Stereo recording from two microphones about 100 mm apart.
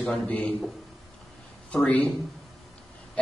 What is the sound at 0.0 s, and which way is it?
Speech, 15° left (ahead or behind).